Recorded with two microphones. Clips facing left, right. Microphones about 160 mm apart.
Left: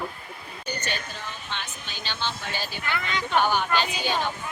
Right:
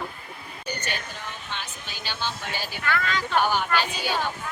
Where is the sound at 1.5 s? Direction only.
10° right (ahead or behind).